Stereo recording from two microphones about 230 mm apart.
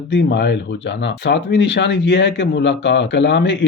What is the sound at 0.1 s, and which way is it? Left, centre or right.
Speech, left.